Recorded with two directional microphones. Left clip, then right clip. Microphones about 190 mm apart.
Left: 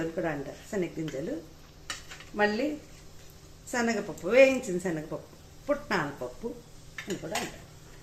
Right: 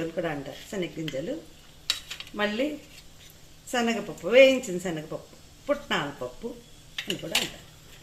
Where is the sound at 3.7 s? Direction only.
10° right (ahead or behind).